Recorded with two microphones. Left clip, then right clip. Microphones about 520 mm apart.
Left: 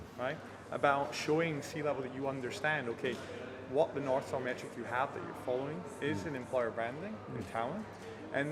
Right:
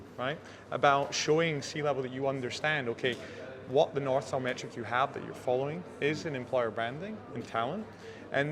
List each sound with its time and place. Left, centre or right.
0.2 s a man's voice: right